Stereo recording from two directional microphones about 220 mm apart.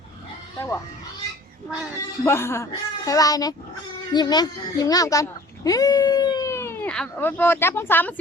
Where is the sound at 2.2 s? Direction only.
10° left (ahead or behind).